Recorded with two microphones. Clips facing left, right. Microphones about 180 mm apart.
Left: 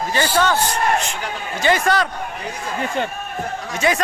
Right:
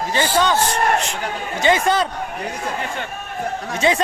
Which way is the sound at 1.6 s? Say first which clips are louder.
Right 1 dB; 20° right (ahead or behind).